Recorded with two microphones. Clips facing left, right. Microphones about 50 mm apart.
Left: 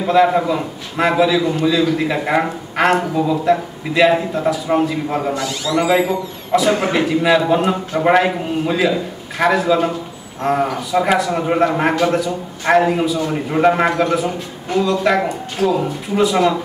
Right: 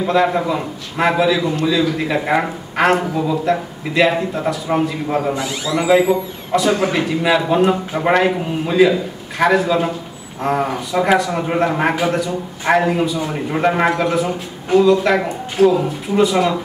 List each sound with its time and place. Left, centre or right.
0.0 s a man's voice: centre
5.3 s speech: centre
5.9 s a man's voice: centre